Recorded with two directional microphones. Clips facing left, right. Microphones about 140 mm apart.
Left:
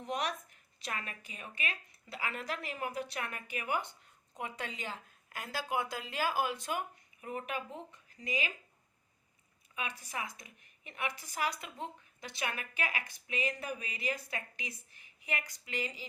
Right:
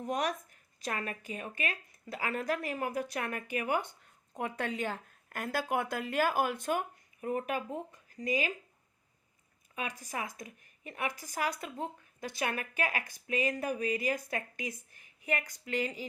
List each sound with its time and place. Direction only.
0.0 s a woman's voice: 40° right (ahead or behind)
9.7 s a woman's voice: 45° right (ahead or behind)